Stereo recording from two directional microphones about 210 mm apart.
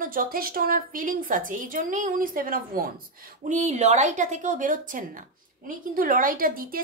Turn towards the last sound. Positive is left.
turn(degrees=-40)  # may be behind; listen again after turning